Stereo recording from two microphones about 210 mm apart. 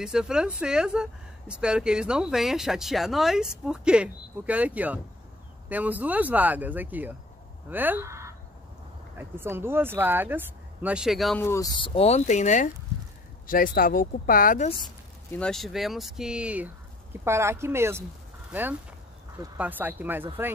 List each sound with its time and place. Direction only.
0.0 s speech: 5° right (ahead or behind)
11.4 s speech: 15° left (ahead or behind)
11.8 s speech: 30° left (ahead or behind)
15.3 s speech: 5° left (ahead or behind)